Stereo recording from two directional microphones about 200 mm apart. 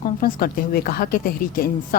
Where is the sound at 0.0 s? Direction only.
45° left (ahead or behind).